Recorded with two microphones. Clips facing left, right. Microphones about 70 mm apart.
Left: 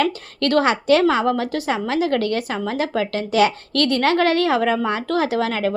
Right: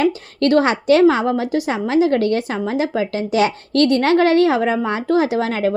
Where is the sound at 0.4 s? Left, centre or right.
Right.